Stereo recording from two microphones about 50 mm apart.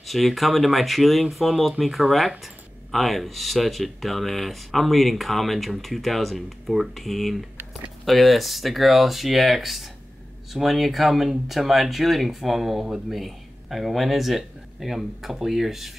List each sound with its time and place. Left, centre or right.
0.0 s speech: centre